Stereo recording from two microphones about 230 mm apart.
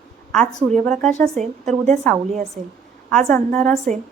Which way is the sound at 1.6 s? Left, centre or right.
Right.